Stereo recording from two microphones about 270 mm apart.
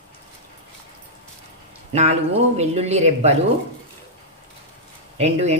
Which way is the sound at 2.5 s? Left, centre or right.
Right.